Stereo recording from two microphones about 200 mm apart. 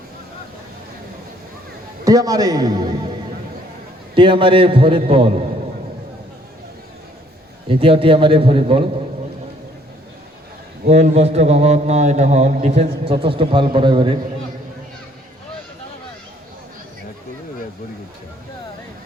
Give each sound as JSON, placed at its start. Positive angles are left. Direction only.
{"t": 2.0, "sound": "a man's voice", "side_deg": -20}
{"t": 4.1, "sound": "a man's voice", "side_deg": -25}
{"t": 7.7, "sound": "a man's voice", "side_deg": -25}
{"t": 10.8, "sound": "a man's voice", "side_deg": -35}